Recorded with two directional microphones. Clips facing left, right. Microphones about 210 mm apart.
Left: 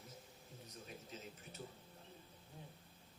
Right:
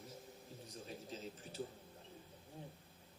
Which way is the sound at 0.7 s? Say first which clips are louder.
Right 4 dB; 30° right (ahead or behind).